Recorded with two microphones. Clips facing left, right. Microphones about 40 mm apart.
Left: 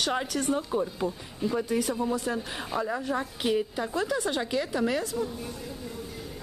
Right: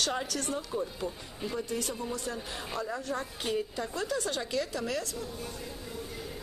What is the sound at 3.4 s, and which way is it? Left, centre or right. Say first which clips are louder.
Speech: left 6 dB; left.